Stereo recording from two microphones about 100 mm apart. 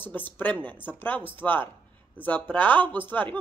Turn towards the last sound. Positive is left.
turn(degrees=20)  # may be behind; listen again after turning